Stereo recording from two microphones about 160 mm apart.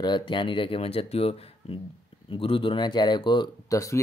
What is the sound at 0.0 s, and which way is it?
Speech, 30° left (ahead or behind).